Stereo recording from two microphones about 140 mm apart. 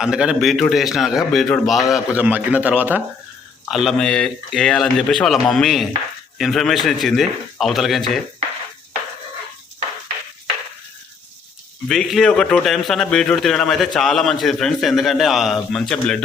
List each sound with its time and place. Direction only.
0.0 s a man's voice: 5° right (ahead or behind)
1.9 s a man's voice: 10° right (ahead or behind)
3.7 s a man's voice: centre (ahead or behind)
11.9 s a man's voice: centre (ahead or behind)